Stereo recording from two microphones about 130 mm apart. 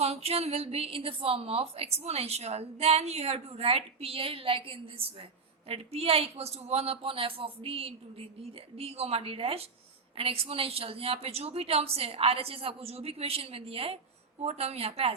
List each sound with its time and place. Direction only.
0.0 s a woman's voice: 50° right (ahead or behind)